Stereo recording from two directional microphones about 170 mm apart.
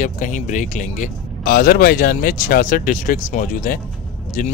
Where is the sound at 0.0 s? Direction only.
50° left (ahead or behind).